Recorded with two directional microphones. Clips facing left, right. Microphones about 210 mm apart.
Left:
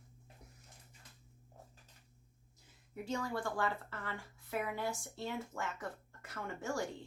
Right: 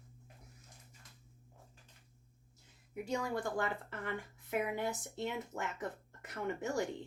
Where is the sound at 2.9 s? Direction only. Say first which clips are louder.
Right 2 dB; 15° right (ahead or behind).